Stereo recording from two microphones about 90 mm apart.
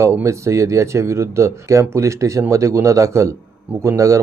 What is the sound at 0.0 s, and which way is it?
A man's voice, 30° right (ahead or behind).